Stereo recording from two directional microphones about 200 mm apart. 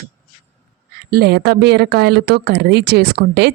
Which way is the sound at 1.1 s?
50° right (ahead or behind).